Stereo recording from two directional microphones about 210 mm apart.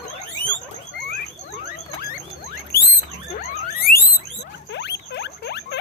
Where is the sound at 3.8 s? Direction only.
45° left (ahead or behind).